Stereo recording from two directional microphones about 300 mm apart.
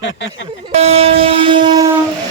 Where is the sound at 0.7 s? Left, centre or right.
Right.